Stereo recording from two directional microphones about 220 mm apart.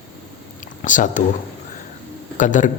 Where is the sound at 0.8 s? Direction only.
35° left (ahead or behind).